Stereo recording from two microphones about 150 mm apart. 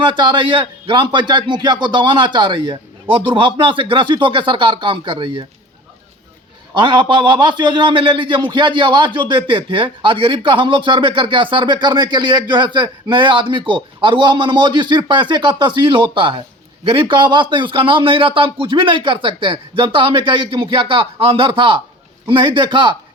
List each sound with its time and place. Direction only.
0.0 s a man's voice: 30° right (ahead or behind)
6.7 s a man's voice: 30° right (ahead or behind)